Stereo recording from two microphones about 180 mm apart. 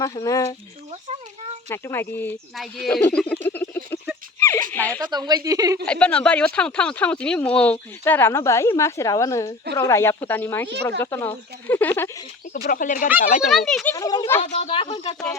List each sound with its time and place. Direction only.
0.0 s speech: 20° left (ahead or behind)
1.7 s speech: 10° left (ahead or behind)
2.6 s a sound: centre (ahead or behind)
4.9 s speech: 25° right (ahead or behind)
5.8 s speech: 5° left (ahead or behind)
12.6 s speech: 50° left (ahead or behind)
13.5 s speech: centre (ahead or behind)
13.9 s speech: 20° left (ahead or behind)
14.4 s speech: 35° left (ahead or behind)